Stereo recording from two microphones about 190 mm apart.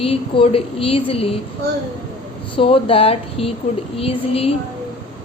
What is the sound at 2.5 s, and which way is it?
Speech, 30° left (ahead or behind).